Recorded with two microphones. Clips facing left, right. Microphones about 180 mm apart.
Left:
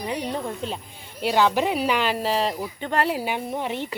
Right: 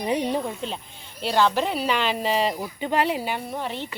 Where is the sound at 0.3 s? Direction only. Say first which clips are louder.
Right 1 dB; centre (ahead or behind).